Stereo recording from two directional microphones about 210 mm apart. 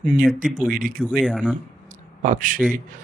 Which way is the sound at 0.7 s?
40° right (ahead or behind).